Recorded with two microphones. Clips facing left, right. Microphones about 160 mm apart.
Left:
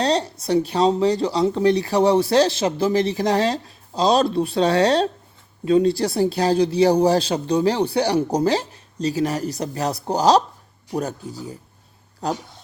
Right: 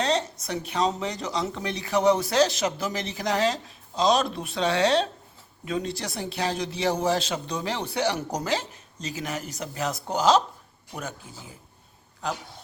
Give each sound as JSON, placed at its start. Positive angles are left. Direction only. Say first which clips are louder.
{"t": 0.0, "sound": "speech", "louder": "left 5 dB", "side_deg": 35}